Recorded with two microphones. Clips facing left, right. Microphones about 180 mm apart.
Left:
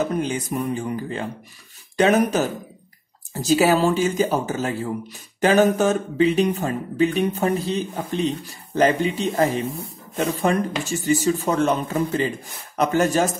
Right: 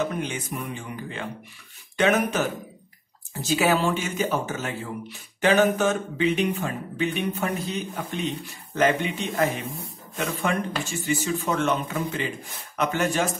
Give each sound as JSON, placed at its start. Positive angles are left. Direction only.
{"t": 0.0, "sound": "speech", "side_deg": 40}